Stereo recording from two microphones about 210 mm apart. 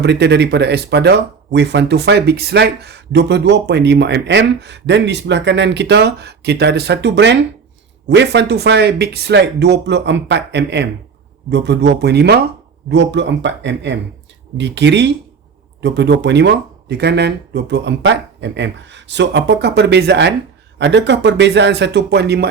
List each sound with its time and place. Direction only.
0.0 s speech: 55° right (ahead or behind)